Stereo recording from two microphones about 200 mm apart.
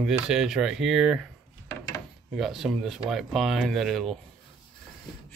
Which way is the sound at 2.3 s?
Centre (ahead or behind).